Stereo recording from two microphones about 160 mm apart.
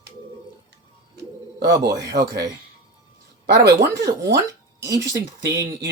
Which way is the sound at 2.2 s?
20° right (ahead or behind).